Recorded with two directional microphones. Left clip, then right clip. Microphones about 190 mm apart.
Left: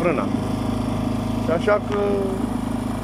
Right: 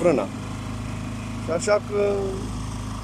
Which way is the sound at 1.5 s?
5° right (ahead or behind).